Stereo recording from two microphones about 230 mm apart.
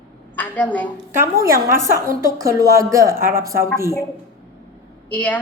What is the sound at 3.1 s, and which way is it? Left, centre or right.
Speech, right.